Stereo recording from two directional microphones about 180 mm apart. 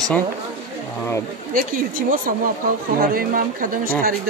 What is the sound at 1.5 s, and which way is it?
A woman's voice, 50° right (ahead or behind).